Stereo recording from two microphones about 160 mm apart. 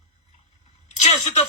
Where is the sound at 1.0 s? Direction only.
45° left (ahead or behind).